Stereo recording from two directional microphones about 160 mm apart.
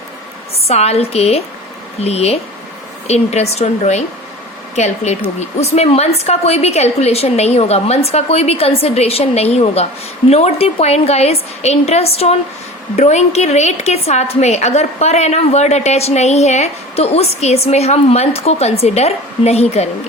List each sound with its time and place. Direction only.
0.7 s a woman's voice: 40° left (ahead or behind)